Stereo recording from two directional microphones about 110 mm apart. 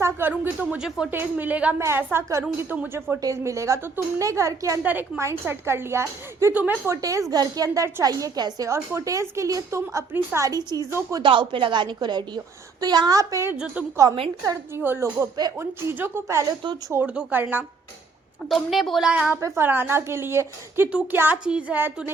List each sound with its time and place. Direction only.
0.0 s a sound: 15° right (ahead or behind)
0.7 s a woman's voice: 5° right (ahead or behind)
1.1 s a woman's voice: 15° right (ahead or behind)
3.2 s speech: 30° right (ahead or behind)
4.8 s speech: 15° right (ahead or behind)
6.9 s a woman's voice: 30° right (ahead or behind)
10.6 s a woman's voice: 40° right (ahead or behind)
13.5 s a woman's voice: 15° right (ahead or behind)
13.9 s speech: 30° right (ahead or behind)
17.2 s a woman's voice: 15° right (ahead or behind)
18.4 s a woman's voice: centre (ahead or behind)
19.4 s a woman's voice: 25° right (ahead or behind)